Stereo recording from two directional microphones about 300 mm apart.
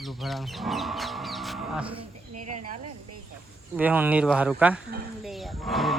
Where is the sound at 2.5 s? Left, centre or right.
Right.